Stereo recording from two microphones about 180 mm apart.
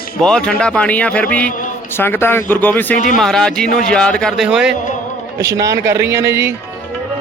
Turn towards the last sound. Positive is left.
turn(degrees=-15)  # may be behind; listen again after turning